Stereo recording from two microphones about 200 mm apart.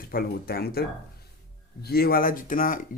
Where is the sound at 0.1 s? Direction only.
50° left (ahead or behind).